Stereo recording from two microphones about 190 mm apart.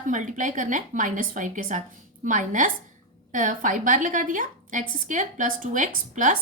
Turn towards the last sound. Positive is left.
turn(degrees=-40)  # may be behind; listen again after turning